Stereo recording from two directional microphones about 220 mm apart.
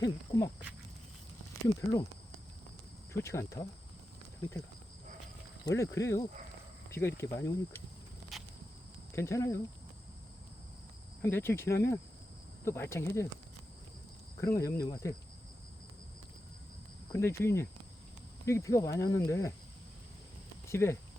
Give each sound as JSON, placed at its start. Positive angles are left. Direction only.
{"t": 0.0, "sound": "speech", "side_deg": 15}
{"t": 1.6, "sound": "speech", "side_deg": 15}
{"t": 3.1, "sound": "speech", "side_deg": 10}
{"t": 5.6, "sound": "speech", "side_deg": 15}
{"t": 8.3, "sound": "a sound", "side_deg": 0}
{"t": 9.1, "sound": "speech", "side_deg": 15}
{"t": 11.2, "sound": "speech", "side_deg": 10}
{"t": 14.4, "sound": "speech", "side_deg": 15}
{"t": 17.1, "sound": "speech", "side_deg": 10}
{"t": 20.7, "sound": "speech", "side_deg": 10}